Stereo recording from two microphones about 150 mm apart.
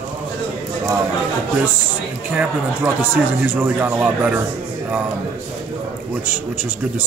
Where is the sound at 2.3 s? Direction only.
10° right (ahead or behind).